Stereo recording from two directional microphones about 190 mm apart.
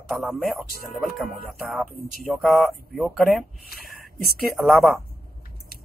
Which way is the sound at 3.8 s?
50° right (ahead or behind).